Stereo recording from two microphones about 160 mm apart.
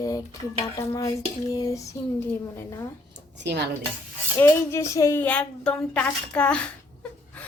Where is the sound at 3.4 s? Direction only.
90° right.